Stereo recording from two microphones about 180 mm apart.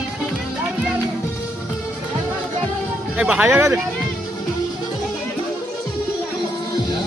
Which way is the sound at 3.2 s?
5° right (ahead or behind).